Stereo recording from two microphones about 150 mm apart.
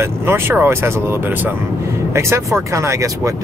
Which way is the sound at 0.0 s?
15° right (ahead or behind).